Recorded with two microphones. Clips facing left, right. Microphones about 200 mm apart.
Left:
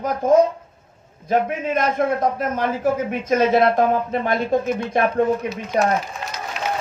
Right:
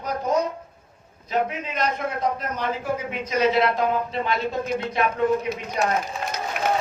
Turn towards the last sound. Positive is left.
turn(degrees=-55)  # may be behind; listen again after turning